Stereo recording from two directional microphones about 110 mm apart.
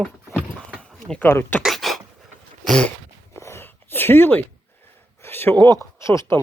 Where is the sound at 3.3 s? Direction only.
25° left (ahead or behind).